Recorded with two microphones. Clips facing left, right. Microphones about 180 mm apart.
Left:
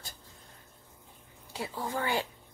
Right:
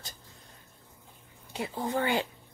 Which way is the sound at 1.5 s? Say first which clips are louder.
Right 4 dB; 25° right (ahead or behind).